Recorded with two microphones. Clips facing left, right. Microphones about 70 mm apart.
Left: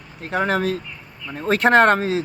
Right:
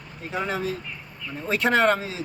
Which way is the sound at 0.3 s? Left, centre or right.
Left.